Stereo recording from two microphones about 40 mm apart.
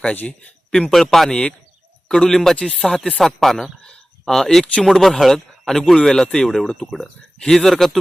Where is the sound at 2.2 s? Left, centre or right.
Centre.